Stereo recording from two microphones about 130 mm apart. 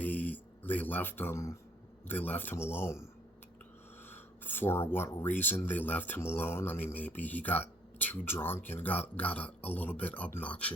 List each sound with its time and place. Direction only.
0.0 s a sound: 15° left (ahead or behind)
2.0 s speech: 15° left (ahead or behind)
4.1 s speech: 15° left (ahead or behind)